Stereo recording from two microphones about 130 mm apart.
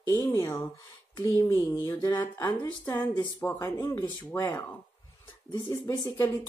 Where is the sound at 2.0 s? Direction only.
35° left (ahead or behind).